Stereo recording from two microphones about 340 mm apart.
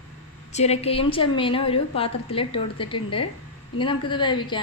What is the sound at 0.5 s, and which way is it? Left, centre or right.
A woman's voice, centre.